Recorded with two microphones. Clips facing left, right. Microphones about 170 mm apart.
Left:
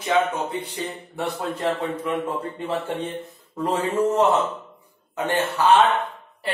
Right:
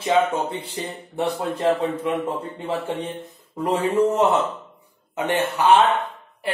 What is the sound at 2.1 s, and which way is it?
Speech, 15° right (ahead or behind).